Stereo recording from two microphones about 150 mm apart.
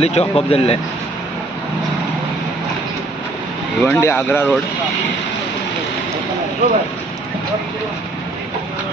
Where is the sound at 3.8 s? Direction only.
15° left (ahead or behind).